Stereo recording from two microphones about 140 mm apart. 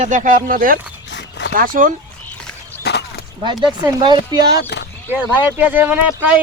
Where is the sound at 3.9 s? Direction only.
30° right (ahead or behind).